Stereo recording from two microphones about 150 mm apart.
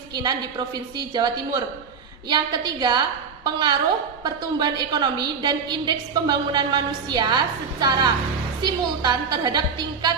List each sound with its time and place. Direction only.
0.1 s a woman's voice: 25° right (ahead or behind)
8.6 s a woman's voice: 30° right (ahead or behind)